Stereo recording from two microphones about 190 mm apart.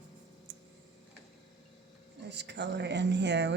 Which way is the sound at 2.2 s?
65° right (ahead or behind).